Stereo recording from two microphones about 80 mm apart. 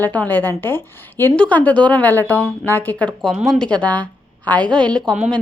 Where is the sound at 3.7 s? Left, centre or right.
Centre.